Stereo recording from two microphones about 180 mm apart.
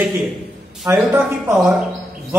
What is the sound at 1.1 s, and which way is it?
Speech, 15° right (ahead or behind).